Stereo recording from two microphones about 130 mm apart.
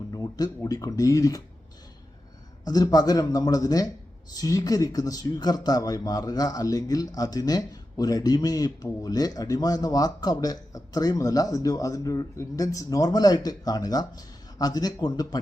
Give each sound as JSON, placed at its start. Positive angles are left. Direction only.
{"t": 0.1, "sound": "speech", "side_deg": 30}
{"t": 2.6, "sound": "speech", "side_deg": 30}